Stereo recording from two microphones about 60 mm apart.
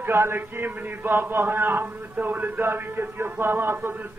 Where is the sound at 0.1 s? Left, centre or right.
Right.